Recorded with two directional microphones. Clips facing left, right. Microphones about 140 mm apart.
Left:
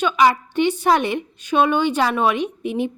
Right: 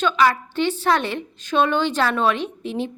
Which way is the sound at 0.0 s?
15° left (ahead or behind).